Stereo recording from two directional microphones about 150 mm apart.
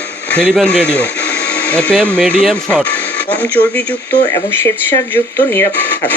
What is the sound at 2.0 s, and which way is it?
Speech, 10° right (ahead or behind).